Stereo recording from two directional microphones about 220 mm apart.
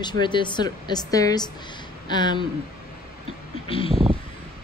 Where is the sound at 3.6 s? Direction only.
25° left (ahead or behind).